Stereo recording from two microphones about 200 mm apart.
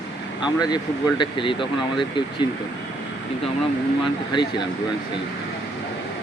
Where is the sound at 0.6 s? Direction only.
20° left (ahead or behind).